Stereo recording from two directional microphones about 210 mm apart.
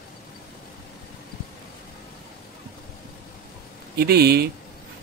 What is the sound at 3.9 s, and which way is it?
Speech, 50° right (ahead or behind).